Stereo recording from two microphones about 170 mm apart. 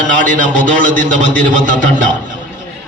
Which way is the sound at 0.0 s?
50° right (ahead or behind).